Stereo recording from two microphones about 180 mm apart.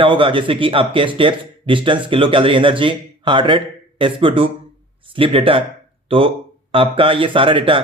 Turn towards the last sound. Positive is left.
turn(degrees=-30)  # may be behind; listen again after turning